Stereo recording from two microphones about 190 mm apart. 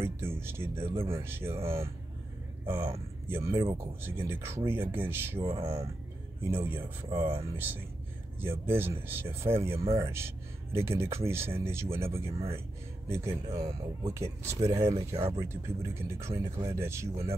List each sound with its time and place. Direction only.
0.0 s speech: 10° right (ahead or behind)
0.9 s speech: 30° right (ahead or behind)
1.2 s speech: 15° right (ahead or behind)